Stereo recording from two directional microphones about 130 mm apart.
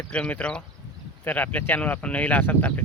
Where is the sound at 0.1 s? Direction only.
10° left (ahead or behind).